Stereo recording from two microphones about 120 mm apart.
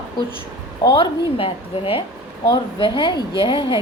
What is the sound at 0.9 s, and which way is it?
A woman's voice, 50° left (ahead or behind).